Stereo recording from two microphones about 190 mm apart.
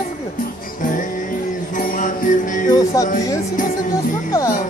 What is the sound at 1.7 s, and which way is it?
Music, 45° left (ahead or behind).